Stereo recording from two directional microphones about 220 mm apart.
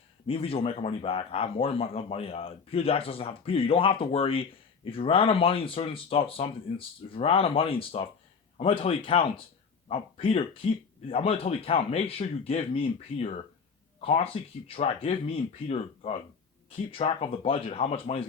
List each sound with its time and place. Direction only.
0.3 s speech: 25° left (ahead or behind)